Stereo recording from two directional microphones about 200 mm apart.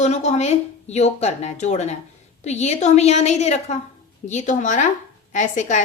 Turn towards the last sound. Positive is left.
turn(degrees=35)  # may be behind; listen again after turning